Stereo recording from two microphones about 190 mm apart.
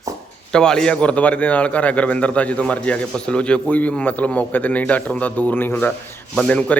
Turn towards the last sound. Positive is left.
turn(degrees=5)  # may be behind; listen again after turning